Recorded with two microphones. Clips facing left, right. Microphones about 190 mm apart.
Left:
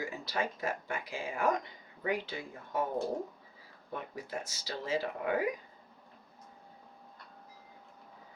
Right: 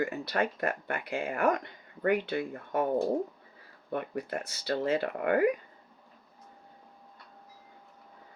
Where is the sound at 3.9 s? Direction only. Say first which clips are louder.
Right 7 dB; 60° right (ahead or behind).